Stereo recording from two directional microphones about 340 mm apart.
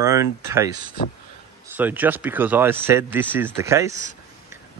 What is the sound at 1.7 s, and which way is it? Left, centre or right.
Speech, centre.